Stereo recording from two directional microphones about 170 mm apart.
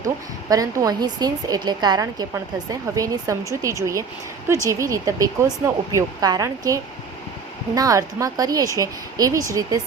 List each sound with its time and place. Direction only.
0.5 s a woman's voice: 20° right (ahead or behind)
7.8 s a woman's voice: 20° right (ahead or behind)